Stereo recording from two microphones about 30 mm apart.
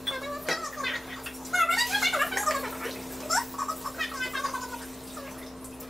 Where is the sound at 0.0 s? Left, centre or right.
Centre.